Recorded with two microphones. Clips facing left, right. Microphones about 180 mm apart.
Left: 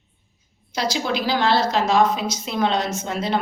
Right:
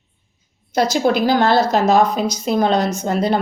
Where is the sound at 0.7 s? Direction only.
50° right (ahead or behind).